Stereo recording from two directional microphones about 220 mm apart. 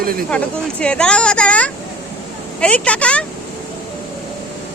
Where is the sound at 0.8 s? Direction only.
5° left (ahead or behind).